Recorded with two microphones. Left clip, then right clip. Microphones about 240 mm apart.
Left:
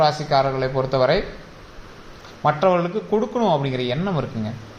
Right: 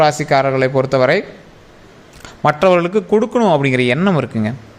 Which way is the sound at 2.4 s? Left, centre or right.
Right.